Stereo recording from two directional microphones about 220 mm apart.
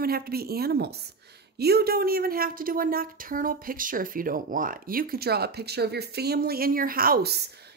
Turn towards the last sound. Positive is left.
turn(degrees=-45)  # may be behind; listen again after turning